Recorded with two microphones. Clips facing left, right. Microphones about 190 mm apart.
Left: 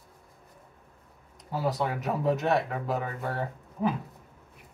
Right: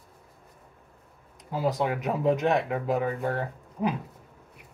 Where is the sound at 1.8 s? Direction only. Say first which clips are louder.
Right 3 dB; 15° right (ahead or behind).